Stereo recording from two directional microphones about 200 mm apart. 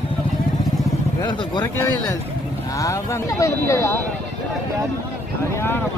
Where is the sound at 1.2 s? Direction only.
20° left (ahead or behind).